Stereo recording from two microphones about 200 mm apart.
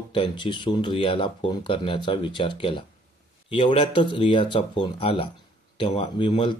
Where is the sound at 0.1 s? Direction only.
25° left (ahead or behind).